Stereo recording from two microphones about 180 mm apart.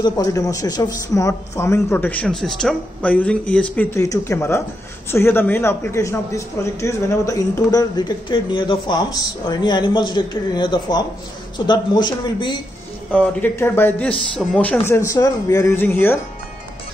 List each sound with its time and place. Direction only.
0.0 s a man's voice: 20° left (ahead or behind)
13.1 s speech: 10° left (ahead or behind)